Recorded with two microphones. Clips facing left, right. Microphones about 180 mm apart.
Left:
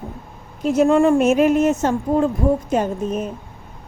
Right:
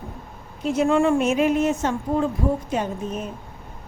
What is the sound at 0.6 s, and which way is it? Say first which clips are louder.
Speech: left 4 dB; 40° left (ahead or behind).